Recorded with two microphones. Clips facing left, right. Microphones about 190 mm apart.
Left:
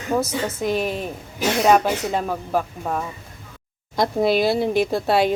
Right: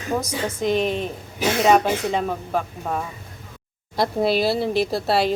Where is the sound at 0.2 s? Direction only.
5° left (ahead or behind).